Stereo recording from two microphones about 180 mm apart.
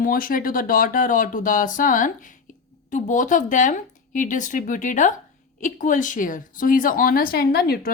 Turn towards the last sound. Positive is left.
turn(degrees=60)  # may be behind; listen again after turning